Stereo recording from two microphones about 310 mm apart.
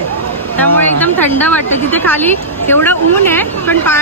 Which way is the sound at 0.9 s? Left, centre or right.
Centre.